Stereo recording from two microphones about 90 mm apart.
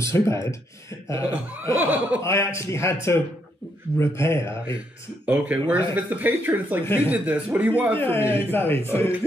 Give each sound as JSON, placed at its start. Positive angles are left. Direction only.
{"t": 0.0, "sound": "a man's voice", "side_deg": 35}
{"t": 1.8, "sound": "speech", "side_deg": -15}
{"t": 2.2, "sound": "a man's voice", "side_deg": 30}
{"t": 5.2, "sound": "speech", "side_deg": -15}
{"t": 7.9, "sound": "a man's voice", "side_deg": 25}